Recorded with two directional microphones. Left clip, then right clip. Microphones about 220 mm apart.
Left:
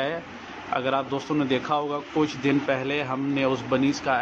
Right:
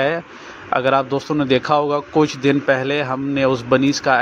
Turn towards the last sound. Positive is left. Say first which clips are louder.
# right 8 dB
turn(degrees=-25)  # may be behind; listen again after turning